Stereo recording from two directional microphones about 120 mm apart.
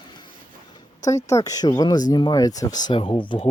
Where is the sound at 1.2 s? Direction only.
25° left (ahead or behind).